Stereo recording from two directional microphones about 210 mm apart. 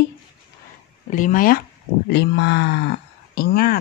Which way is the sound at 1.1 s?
40° left (ahead or behind).